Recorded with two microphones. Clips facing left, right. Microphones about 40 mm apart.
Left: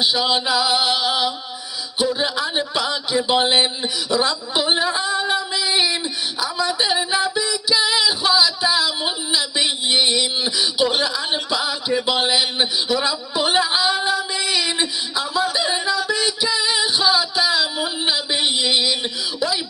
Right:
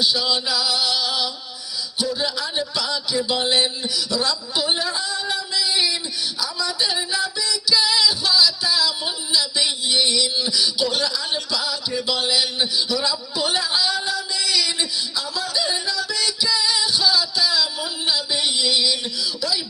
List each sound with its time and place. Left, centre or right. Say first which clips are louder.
0.0 s music: left 2 dB; left
2.0 s speech: left 4 dB; left
6.4 s a sound: left 4 dB; left